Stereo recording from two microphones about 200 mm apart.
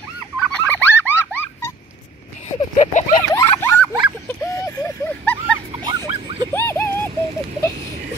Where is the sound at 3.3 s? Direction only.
15° left (ahead or behind).